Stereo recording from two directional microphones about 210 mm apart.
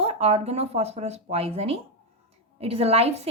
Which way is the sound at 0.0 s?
30° right (ahead or behind).